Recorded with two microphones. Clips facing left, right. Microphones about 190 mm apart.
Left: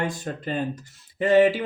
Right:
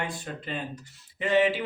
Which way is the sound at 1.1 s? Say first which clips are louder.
Left 6 dB; 45° left (ahead or behind).